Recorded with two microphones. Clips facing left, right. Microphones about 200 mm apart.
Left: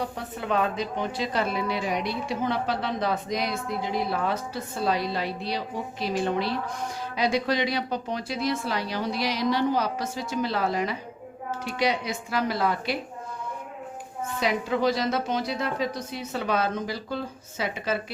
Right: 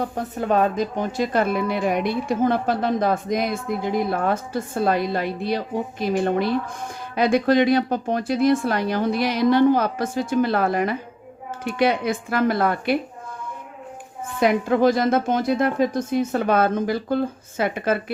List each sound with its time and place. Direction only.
0.0 s speech: 45° right (ahead or behind)
14.3 s speech: 55° right (ahead or behind)